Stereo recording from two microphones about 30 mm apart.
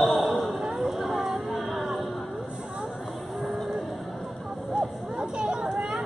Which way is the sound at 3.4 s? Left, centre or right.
Centre.